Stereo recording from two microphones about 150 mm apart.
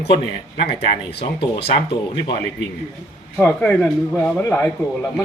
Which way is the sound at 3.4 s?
10° left (ahead or behind).